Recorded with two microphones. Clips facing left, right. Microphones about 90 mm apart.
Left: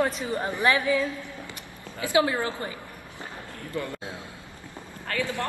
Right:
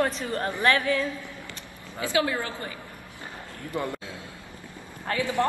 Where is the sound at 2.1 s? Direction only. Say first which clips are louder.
Left 3 dB; 25° left (ahead or behind).